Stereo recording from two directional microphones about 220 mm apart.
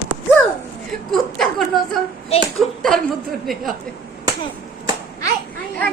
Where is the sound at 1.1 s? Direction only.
Centre (ahead or behind).